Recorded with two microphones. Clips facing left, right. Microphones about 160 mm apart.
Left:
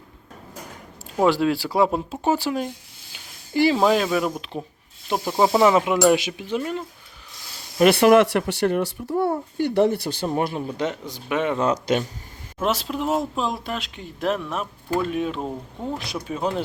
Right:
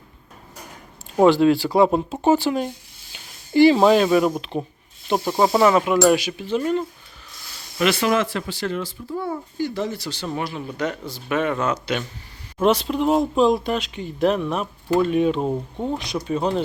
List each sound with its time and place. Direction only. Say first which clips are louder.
1.2 s speech: right 5 dB; 5° left (ahead or behind)
5.6 s speech: right 1 dB; 20° left (ahead or behind)
6.5 s speech: right 5 dB; 5° left (ahead or behind)
7.9 s speech: left 6 dB; 65° left (ahead or behind); by 10.6 s 45° left (ahead or behind)
10.8 s speech: even; 20° left (ahead or behind)
11.6 s speech: left 3 dB; 35° left (ahead or behind)
12.6 s speech: right 5 dB; 5° left (ahead or behind)
15.4 s speech: right 6 dB; 20° right (ahead or behind)
16.2 s speech: right 3 dB; 5° left (ahead or behind)